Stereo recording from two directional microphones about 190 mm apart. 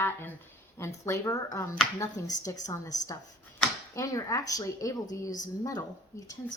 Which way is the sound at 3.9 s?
15° left (ahead or behind).